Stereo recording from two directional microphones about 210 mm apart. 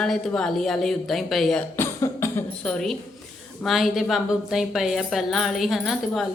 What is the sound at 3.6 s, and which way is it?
A woman's voice, centre (ahead or behind).